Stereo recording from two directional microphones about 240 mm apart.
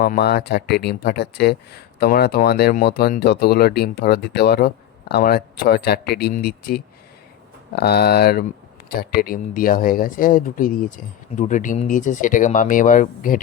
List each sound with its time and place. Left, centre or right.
0.0 s speech: left